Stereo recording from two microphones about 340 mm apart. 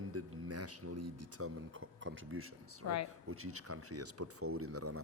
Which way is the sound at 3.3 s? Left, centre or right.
Right.